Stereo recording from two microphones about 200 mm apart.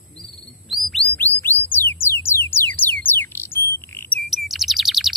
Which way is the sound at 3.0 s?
10° left (ahead or behind).